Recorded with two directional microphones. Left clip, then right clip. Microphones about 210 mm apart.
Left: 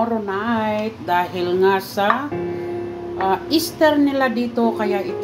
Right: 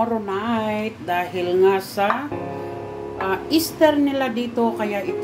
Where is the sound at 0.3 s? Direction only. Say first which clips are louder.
Left 2 dB; 5° left (ahead or behind).